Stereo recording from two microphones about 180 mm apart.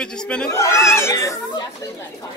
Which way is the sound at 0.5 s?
15° left (ahead or behind).